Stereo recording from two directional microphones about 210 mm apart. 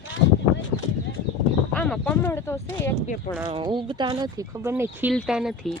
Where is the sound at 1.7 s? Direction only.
5° left (ahead or behind).